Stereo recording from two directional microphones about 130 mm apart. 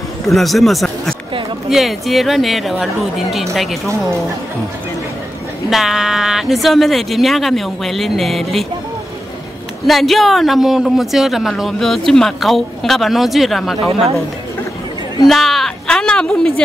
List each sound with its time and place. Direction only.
0.3 s speech: centre (ahead or behind)
5.7 s speech: 5° right (ahead or behind)
9.8 s speech: centre (ahead or behind)
15.2 s a woman's voice: centre (ahead or behind)